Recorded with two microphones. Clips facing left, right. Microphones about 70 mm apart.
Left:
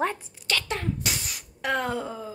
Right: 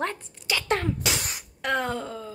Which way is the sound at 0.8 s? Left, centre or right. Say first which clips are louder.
Right 3 dB; right.